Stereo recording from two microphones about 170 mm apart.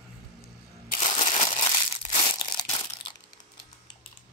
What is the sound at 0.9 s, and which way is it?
Crushing, 45° left (ahead or behind).